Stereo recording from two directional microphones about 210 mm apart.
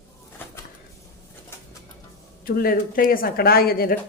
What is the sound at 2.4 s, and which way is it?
Speech, 45° left (ahead or behind).